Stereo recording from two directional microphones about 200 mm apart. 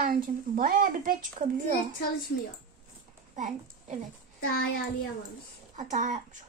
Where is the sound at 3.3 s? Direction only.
40° right (ahead or behind).